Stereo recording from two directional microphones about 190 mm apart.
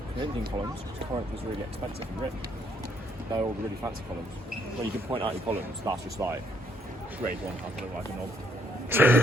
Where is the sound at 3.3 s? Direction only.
20° right (ahead or behind).